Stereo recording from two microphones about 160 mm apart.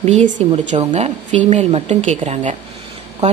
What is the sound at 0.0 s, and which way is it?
Speech, 45° right (ahead or behind).